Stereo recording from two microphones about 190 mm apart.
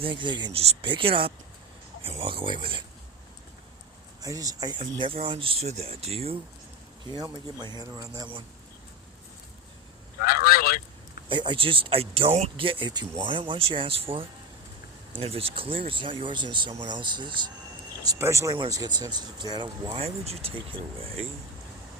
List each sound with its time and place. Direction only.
0.0 s speech: 25° right (ahead or behind)
4.2 s speech: 20° right (ahead or behind)
10.2 s honk: 50° left (ahead or behind)
11.3 s speech: 25° right (ahead or behind)